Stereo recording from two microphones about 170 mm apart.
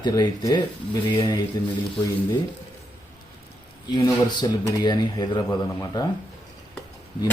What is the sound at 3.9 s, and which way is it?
Speech, 25° left (ahead or behind).